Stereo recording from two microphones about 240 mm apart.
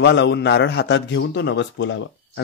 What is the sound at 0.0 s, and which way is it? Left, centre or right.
A man's voice, left.